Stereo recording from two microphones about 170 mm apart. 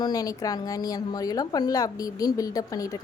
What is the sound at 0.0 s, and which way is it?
Speech, 20° left (ahead or behind).